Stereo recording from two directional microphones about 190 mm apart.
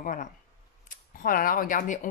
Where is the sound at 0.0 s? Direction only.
45° left (ahead or behind).